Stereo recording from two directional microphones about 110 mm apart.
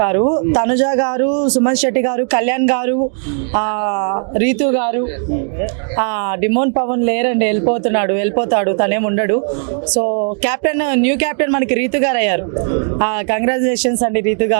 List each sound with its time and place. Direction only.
0.0 s speech: 20° right (ahead or behind)